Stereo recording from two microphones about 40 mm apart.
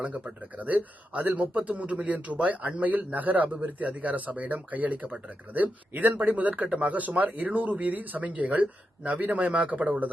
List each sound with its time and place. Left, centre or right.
0.6 s speech: right
5.9 s speech: right